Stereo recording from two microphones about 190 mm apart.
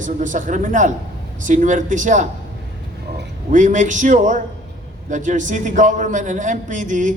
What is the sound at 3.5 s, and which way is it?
A woman's voice, 40° right (ahead or behind).